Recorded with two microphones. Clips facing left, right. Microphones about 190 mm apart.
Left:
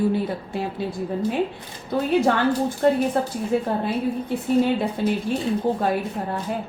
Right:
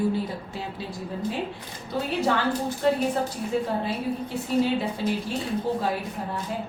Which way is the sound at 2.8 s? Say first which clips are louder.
Left 4 dB; 50° left (ahead or behind).